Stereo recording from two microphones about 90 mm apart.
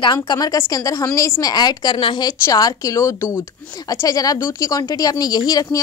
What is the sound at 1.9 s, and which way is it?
Speech, 75° left (ahead or behind).